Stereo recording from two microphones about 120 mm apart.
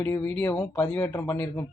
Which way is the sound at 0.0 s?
15° left (ahead or behind).